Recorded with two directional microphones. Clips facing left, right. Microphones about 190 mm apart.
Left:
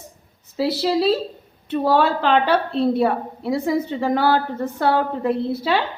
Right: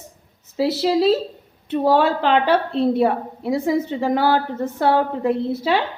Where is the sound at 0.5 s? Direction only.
20° right (ahead or behind).